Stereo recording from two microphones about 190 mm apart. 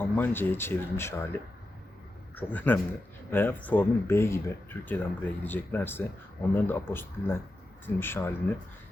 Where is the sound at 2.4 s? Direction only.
10° left (ahead or behind).